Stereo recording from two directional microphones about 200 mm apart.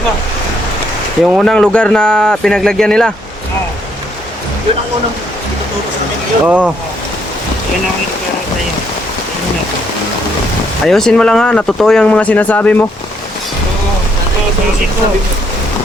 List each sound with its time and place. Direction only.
1.2 s speech: centre (ahead or behind)
6.4 s speech: 5° right (ahead or behind)
10.8 s speech: centre (ahead or behind)